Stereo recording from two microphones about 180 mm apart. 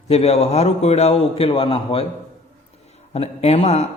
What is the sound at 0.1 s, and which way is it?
A man's voice, 35° left (ahead or behind).